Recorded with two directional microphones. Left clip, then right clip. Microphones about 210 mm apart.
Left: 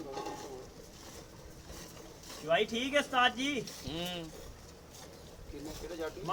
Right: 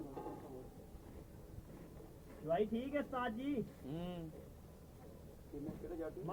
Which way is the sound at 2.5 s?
20° left (ahead or behind).